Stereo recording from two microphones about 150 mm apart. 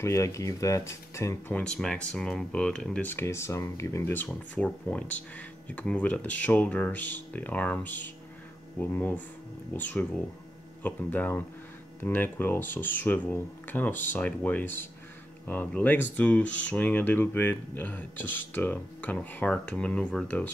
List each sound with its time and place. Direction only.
0.0 s speech: 20° left (ahead or behind)
1.6 s speech: 5° left (ahead or behind)